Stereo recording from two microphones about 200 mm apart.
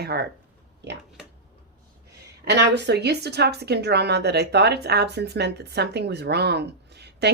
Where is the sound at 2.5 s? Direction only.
60° right (ahead or behind).